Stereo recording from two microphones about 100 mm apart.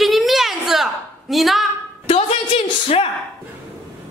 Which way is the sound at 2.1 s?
80° left.